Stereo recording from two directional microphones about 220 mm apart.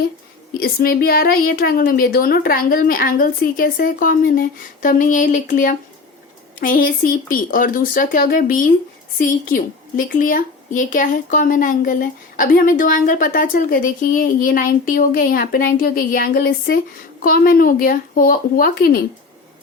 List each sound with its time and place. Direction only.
0.5 s a woman's voice: 40° left (ahead or behind)